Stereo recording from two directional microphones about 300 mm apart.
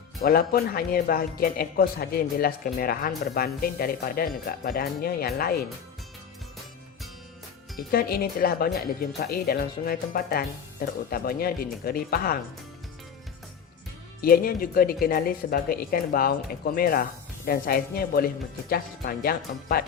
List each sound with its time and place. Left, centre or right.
0.2 s speech: left
7.9 s speech: left
14.2 s speech: left